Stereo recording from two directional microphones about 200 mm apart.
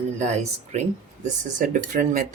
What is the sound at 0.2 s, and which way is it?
Speech, 35° right (ahead or behind).